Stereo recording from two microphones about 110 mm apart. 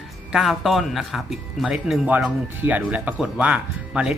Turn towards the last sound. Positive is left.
turn(degrees=-10)  # may be behind; listen again after turning